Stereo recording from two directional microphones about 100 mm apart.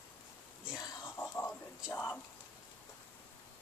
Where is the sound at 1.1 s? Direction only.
15° left (ahead or behind).